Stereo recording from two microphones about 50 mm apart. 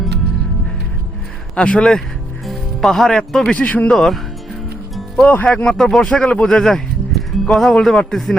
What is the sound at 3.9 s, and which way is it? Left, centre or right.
Speech, centre.